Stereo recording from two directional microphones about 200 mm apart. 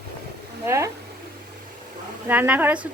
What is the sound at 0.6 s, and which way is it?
Speech, 15° right (ahead or behind).